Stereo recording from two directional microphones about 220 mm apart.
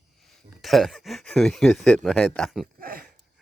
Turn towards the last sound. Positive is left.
turn(degrees=-40)  # may be behind; listen again after turning